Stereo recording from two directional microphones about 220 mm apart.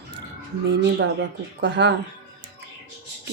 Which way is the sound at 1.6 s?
55° right (ahead or behind).